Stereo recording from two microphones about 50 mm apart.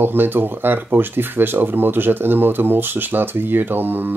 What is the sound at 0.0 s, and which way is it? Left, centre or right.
Speech, right.